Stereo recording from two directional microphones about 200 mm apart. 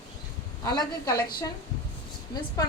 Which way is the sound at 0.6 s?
20° left (ahead or behind).